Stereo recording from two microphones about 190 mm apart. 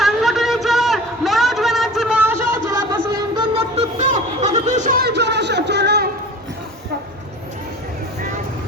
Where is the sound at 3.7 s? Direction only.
40° right (ahead or behind); by 6.0 s 60° right (ahead or behind).